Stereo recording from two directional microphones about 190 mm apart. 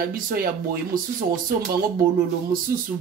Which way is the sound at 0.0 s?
50° right (ahead or behind).